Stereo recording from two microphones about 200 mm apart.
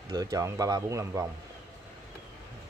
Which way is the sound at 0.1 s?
20° right (ahead or behind).